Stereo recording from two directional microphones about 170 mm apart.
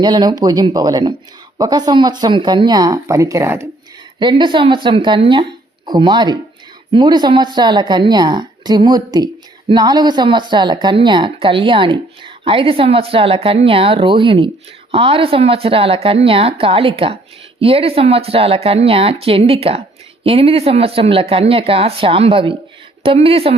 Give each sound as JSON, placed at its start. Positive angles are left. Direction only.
{"t": 0.0, "sound": "speech", "side_deg": -25}
{"t": 4.2, "sound": "a woman's voice", "side_deg": -30}